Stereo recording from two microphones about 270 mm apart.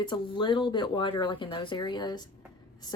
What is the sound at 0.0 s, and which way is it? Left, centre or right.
A woman's voice, centre.